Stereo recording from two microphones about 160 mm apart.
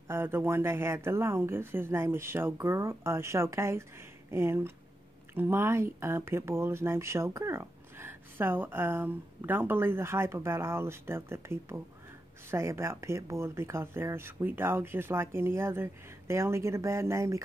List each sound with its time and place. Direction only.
0.1 s speech: 15° right (ahead or behind)